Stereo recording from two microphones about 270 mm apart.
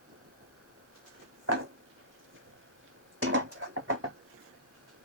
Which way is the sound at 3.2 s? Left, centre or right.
Right.